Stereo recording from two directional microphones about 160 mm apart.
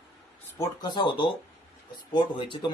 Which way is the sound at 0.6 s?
25° left (ahead or behind).